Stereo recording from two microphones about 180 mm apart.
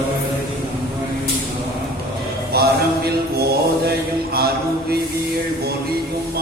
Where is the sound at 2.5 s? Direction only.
60° right (ahead or behind).